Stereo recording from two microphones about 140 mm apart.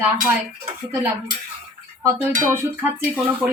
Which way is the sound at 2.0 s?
15° right (ahead or behind).